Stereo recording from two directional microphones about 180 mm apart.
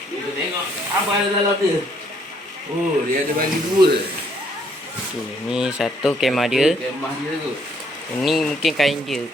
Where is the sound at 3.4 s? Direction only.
60° right (ahead or behind).